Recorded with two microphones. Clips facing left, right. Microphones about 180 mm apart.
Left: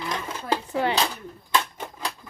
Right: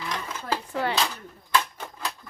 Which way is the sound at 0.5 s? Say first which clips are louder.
Left 3 dB; 20° left (ahead or behind).